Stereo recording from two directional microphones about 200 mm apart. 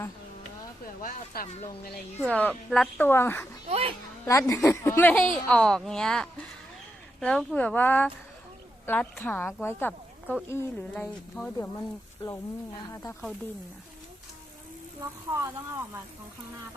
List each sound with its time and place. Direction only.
1.0 s speech: 45° left (ahead or behind)
2.3 s a woman's voice: 5° left (ahead or behind)
3.7 s a child's voice: 30° right (ahead or behind)
4.3 s a woman's voice: 15° left (ahead or behind)
12.2 s a woman's voice: 25° left (ahead or behind)
15.0 s speech: 15° right (ahead or behind)